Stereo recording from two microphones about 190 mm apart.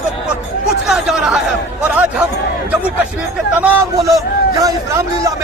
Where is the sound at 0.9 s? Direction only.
Centre (ahead or behind).